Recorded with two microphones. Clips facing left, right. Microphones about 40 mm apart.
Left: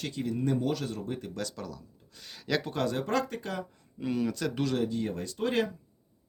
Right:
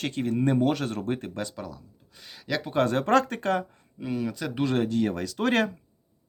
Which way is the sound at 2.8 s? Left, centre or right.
Right.